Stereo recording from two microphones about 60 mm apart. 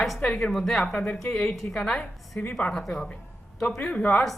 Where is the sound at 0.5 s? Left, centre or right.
Centre.